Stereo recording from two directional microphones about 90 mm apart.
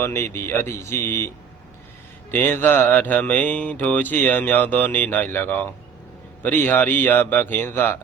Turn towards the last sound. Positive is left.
turn(degrees=25)  # may be behind; listen again after turning